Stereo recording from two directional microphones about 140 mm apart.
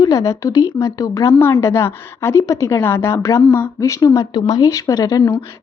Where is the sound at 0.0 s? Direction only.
25° left (ahead or behind).